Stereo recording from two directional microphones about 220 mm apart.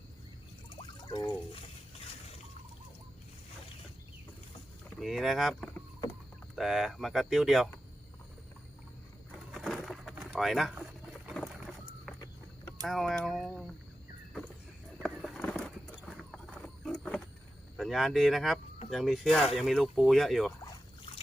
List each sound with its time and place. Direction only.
0.8 s drip: 20° left (ahead or behind)
4.9 s speech: centre (ahead or behind)
9.6 s a sound: centre (ahead or behind)
12.1 s vehicle: centre (ahead or behind)
12.9 s speech: centre (ahead or behind)
15.0 s a sound: 5° left (ahead or behind)
16.3 s wild animals: centre (ahead or behind)
17.7 s speech: centre (ahead or behind)